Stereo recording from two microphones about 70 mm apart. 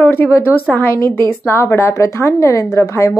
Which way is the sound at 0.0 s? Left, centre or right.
Left.